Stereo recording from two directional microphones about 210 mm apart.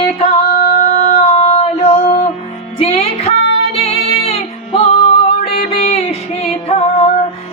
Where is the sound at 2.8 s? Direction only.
30° left (ahead or behind).